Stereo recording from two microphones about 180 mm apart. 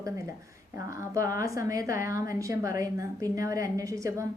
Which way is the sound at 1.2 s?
15° right (ahead or behind).